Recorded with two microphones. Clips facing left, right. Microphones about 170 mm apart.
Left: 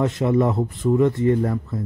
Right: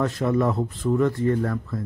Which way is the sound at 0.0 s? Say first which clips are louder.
Left 3 dB; 20° left (ahead or behind).